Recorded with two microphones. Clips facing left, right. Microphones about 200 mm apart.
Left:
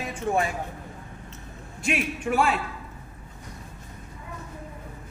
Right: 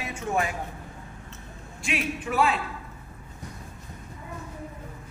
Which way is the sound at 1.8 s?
45° left (ahead or behind).